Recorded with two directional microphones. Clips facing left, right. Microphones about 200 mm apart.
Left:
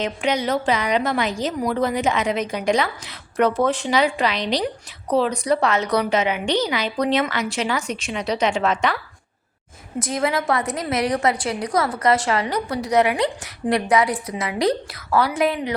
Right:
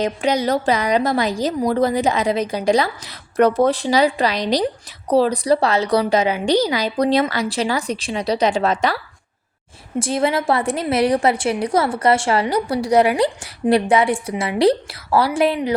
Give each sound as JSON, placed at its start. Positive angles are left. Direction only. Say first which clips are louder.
{"t": 0.0, "sound": "a woman's voice", "louder": "right 3 dB", "side_deg": -35}
{"t": 10.0, "sound": "a woman's voice", "louder": "right 3 dB", "side_deg": -30}